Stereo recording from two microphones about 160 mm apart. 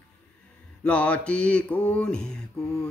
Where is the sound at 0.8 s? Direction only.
10° left (ahead or behind).